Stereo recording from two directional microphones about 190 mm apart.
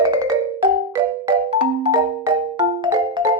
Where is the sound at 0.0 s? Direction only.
20° right (ahead or behind).